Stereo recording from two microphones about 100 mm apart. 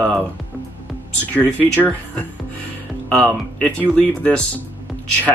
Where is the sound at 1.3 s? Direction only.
15° left (ahead or behind).